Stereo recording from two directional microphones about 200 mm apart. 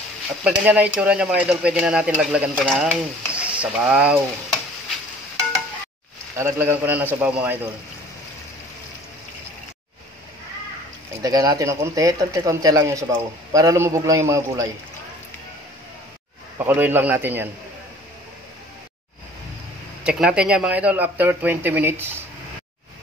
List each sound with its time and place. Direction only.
0.4 s speech: 5° right (ahead or behind)
6.3 s speech: 10° right (ahead or behind)
11.2 s speech: 20° right (ahead or behind)
16.5 s speech: 10° right (ahead or behind)
20.0 s speech: 5° right (ahead or behind)